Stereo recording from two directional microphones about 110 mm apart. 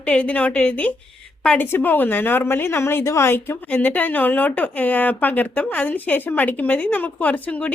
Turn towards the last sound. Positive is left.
turn(degrees=10)  # may be behind; listen again after turning